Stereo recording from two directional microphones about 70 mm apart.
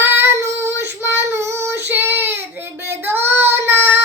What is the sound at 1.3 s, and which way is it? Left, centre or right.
Child singing, right.